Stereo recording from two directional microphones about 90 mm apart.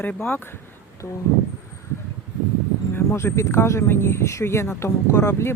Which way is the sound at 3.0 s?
30° left (ahead or behind).